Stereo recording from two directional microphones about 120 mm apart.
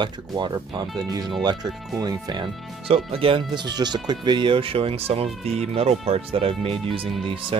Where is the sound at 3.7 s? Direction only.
35° right (ahead or behind).